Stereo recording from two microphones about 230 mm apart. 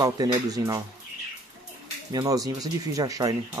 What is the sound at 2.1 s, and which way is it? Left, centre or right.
Speech, centre.